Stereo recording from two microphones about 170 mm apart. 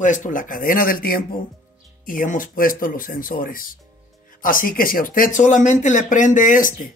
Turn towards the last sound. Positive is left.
turn(degrees=50)  # may be behind; listen again after turning